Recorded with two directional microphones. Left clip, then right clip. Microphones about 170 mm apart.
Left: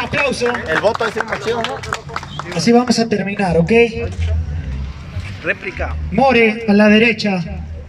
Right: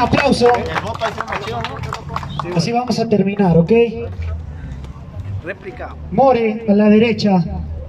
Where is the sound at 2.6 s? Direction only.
10° right (ahead or behind).